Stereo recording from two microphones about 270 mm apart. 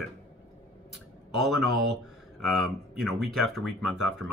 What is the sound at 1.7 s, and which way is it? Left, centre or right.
Speech, right.